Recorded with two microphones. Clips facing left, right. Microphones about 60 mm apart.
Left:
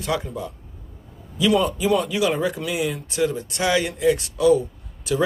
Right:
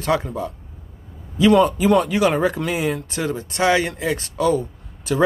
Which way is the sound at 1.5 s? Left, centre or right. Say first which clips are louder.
Right 4 dB; right.